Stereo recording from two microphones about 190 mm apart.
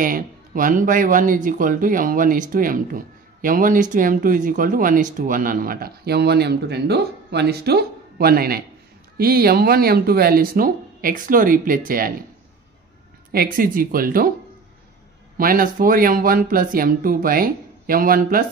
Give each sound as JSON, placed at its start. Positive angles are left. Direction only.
{"t": 0.0, "sound": "speech", "side_deg": -45}
{"t": 13.3, "sound": "speech", "side_deg": -50}
{"t": 15.3, "sound": "speech", "side_deg": -50}